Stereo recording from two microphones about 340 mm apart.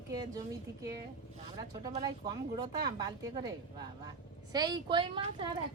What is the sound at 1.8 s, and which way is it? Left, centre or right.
A woman's voice, centre.